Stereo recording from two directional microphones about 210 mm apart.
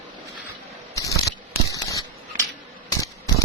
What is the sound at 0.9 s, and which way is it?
Scissors, 15° left (ahead or behind).